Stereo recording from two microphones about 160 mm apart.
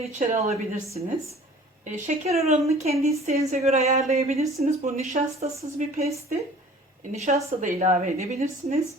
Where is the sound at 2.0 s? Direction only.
45° right (ahead or behind).